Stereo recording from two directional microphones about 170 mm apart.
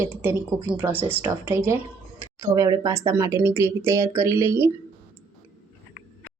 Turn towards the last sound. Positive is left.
turn(degrees=-15)  # may be behind; listen again after turning